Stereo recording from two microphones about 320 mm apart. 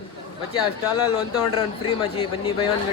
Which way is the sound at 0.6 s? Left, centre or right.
Centre.